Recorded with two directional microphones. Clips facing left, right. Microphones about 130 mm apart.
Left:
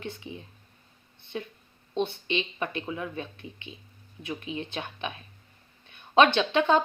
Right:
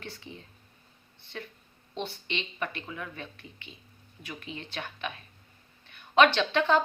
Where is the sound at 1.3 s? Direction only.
20° left (ahead or behind).